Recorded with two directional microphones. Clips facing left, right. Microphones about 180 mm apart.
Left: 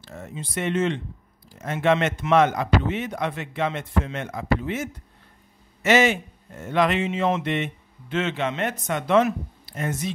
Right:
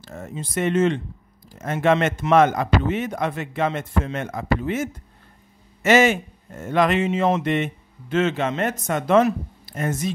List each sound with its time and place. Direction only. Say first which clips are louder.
0.0 s speech: right 3 dB; 45° right (ahead or behind)